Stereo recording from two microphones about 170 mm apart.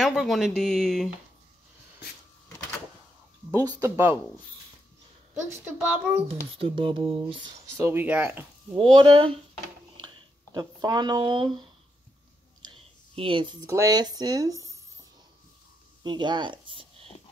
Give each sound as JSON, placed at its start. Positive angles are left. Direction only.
{"t": 0.0, "sound": "speech", "side_deg": 0}
{"t": 3.5, "sound": "speech", "side_deg": -20}
{"t": 5.5, "sound": "speech", "side_deg": -10}
{"t": 6.2, "sound": "speech", "side_deg": -30}
{"t": 7.7, "sound": "speech", "side_deg": -10}
{"t": 8.9, "sound": "speech", "side_deg": -30}
{"t": 10.5, "sound": "speech", "side_deg": -25}
{"t": 12.6, "sound": "a sound", "side_deg": -30}
{"t": 13.7, "sound": "speech", "side_deg": -20}
{"t": 16.0, "sound": "speech", "side_deg": -25}